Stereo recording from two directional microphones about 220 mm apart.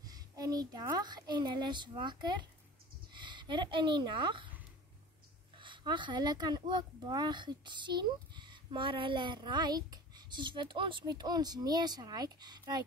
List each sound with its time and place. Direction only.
0.0 s a child's voice: 15° right (ahead or behind)
5.6 s speech: 20° right (ahead or behind)